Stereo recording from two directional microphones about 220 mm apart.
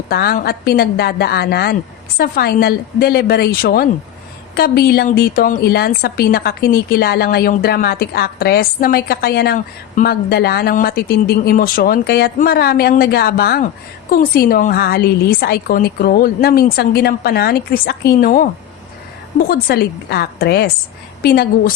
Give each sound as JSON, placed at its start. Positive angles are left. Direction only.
{"t": 0.1, "sound": "speech", "side_deg": 45}